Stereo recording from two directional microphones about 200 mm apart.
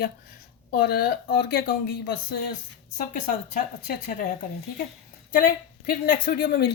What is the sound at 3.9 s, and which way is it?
Speech, 45° left (ahead or behind).